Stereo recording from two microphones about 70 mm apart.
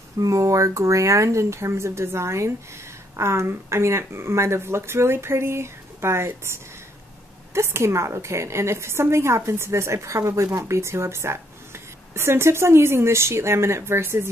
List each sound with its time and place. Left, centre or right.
0.2 s a woman's voice: right
7.5 s a woman's voice: right